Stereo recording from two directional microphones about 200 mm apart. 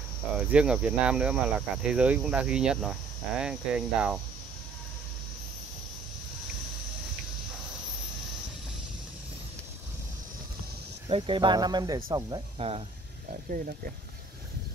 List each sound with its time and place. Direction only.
0.5 s speech: 5° right (ahead or behind)
11.1 s speech: 25° right (ahead or behind)
12.5 s speech: 30° right (ahead or behind)
13.3 s speech: 45° right (ahead or behind)